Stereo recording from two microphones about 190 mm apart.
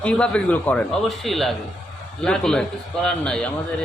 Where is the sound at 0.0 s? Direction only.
5° left (ahead or behind).